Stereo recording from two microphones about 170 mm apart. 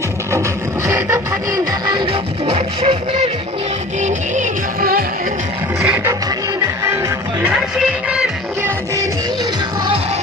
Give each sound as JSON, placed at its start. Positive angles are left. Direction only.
{"t": 0.9, "sound": "music", "side_deg": -15}
{"t": 2.5, "sound": "music", "side_deg": -35}
{"t": 4.0, "sound": "music", "side_deg": -55}
{"t": 5.8, "sound": "music", "side_deg": -15}